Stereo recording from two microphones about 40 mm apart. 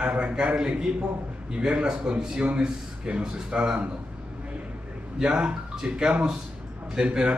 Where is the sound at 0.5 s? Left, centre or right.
Centre.